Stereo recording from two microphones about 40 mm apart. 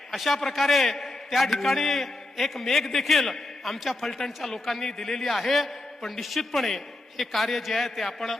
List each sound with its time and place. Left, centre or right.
0.1 s a man's voice: centre